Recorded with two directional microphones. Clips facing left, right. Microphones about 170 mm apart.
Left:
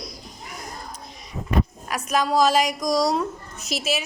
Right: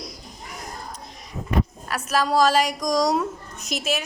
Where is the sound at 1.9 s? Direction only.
15° left (ahead or behind).